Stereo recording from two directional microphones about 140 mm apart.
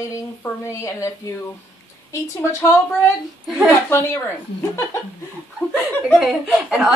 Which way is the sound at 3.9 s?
15° left (ahead or behind).